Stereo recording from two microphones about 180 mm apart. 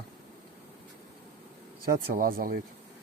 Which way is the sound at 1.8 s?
50° right (ahead or behind).